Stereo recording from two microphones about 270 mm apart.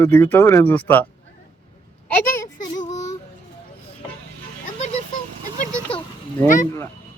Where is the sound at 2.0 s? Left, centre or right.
Centre.